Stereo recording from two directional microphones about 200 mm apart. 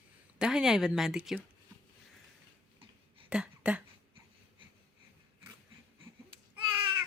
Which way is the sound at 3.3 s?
5° right (ahead or behind).